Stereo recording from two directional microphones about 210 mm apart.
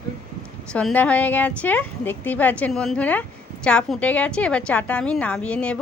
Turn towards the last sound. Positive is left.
turn(degrees=5)  # may be behind; listen again after turning